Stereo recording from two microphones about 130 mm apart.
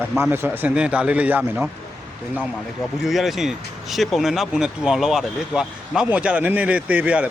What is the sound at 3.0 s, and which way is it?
Speech, centre (ahead or behind).